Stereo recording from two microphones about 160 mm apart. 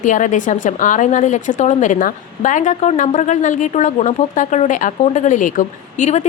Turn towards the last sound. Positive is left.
turn(degrees=50)  # may be behind; listen again after turning